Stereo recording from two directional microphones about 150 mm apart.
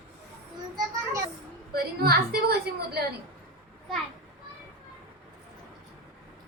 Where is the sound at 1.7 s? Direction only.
90° right.